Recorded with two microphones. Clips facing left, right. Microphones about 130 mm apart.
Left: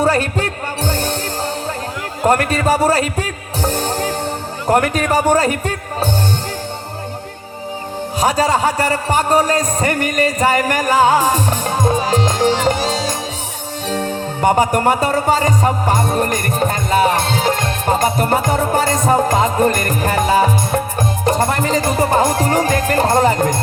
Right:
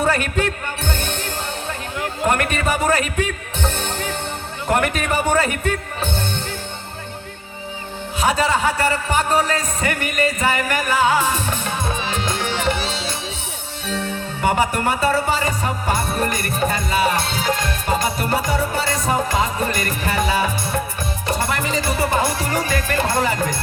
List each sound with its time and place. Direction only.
0.0 s music: 35° left (ahead or behind)
2.2 s a man's voice: 35° left (ahead or behind)
8.2 s a man's voice: 40° left (ahead or behind)
13.8 s music: 40° left (ahead or behind)